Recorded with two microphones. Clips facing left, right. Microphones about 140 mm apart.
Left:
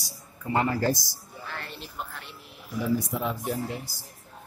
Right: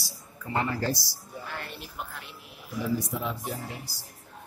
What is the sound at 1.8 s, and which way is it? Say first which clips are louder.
Speech: left 1 dB; 5° right (ahead or behind).